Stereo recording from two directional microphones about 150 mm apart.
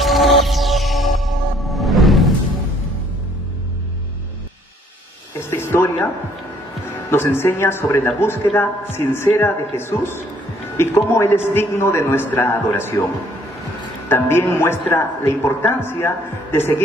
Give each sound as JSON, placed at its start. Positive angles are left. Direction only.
{"t": 0.0, "sound": "music", "side_deg": 0}
{"t": 5.4, "sound": "a sound", "side_deg": 15}
{"t": 7.1, "sound": "a man's voice", "side_deg": 15}
{"t": 14.0, "sound": "a man's voice", "side_deg": 15}